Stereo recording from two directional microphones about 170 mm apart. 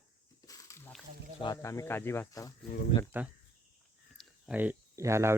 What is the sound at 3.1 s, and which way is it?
Speech, 10° right (ahead or behind).